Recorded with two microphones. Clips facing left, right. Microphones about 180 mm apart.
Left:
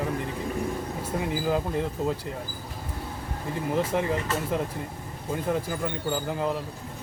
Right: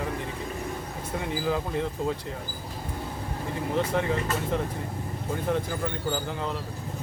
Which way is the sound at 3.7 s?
5° left (ahead or behind).